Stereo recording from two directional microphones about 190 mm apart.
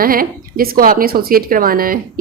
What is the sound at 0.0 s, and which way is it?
A woman's voice, 50° right (ahead or behind).